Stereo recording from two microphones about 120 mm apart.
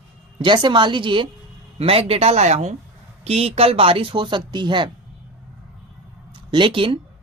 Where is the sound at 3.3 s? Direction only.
60° right (ahead or behind); by 4.9 s 40° right (ahead or behind).